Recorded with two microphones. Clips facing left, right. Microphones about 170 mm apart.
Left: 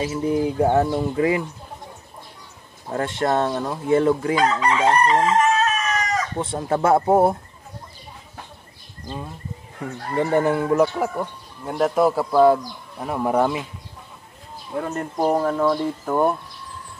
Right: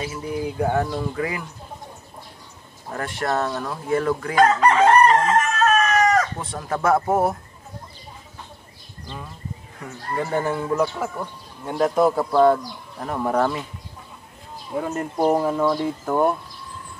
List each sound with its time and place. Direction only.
0.1 s speech: 25° left (ahead or behind)
2.9 s speech: 25° left (ahead or behind)
4.4 s chicken: 50° right (ahead or behind)
6.3 s speech: 25° left (ahead or behind)
9.8 s speech: 30° left (ahead or behind)
10.4 s speech: 15° left (ahead or behind)
11.1 s speech: centre (ahead or behind)
14.8 s speech: 5° right (ahead or behind)